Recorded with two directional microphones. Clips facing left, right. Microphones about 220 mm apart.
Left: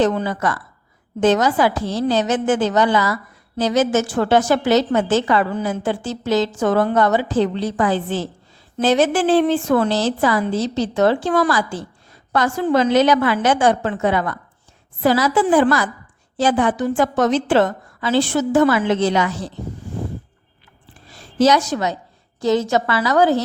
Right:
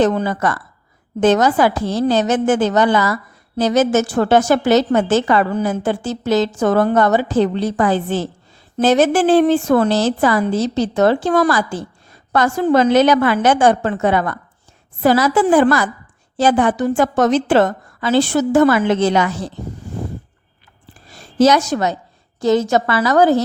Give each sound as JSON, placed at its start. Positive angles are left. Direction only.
{"t": 0.0, "sound": "a woman's voice", "side_deg": -45}
{"t": 21.3, "sound": "a woman's voice", "side_deg": -45}